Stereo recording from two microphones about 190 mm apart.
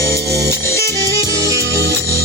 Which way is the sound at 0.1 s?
55° right (ahead or behind).